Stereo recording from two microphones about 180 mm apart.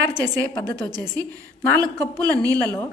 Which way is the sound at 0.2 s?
10° left (ahead or behind).